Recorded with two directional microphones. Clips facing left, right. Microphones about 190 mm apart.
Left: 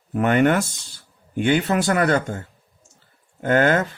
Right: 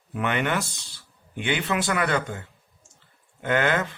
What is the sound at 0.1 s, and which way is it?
Speech, 45° left (ahead or behind).